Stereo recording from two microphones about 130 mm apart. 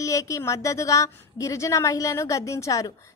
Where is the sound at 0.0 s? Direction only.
25° left (ahead or behind).